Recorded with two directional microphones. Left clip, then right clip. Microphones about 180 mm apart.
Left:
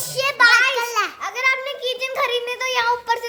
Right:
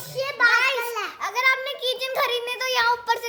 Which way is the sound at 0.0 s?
55° left (ahead or behind).